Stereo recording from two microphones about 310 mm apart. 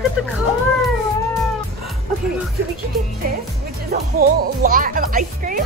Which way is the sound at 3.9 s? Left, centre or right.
Right.